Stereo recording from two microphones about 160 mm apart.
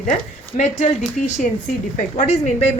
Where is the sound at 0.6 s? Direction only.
45° left (ahead or behind).